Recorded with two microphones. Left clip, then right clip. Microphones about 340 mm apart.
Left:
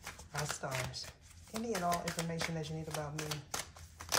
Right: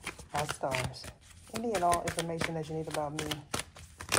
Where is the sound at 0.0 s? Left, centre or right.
Right.